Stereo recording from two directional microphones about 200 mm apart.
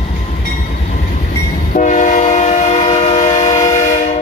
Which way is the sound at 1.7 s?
40° left (ahead or behind).